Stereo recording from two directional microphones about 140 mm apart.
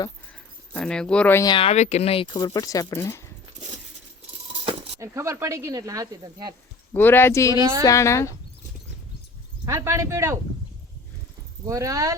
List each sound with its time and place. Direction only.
0.7 s speech: 5° left (ahead or behind)
1.5 s speech: 50° left (ahead or behind); by 3.2 s 20° left (ahead or behind)
4.9 s speech: 20° right (ahead or behind)
6.9 s speech: 15° left (ahead or behind)
7.5 s speech: 25° right (ahead or behind)
7.9 s speech: 20° left (ahead or behind)
9.6 s speech: 20° right (ahead or behind)
11.6 s speech: 25° right (ahead or behind)